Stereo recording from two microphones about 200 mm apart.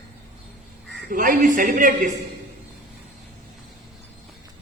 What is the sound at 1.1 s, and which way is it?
Speech, 40° right (ahead or behind).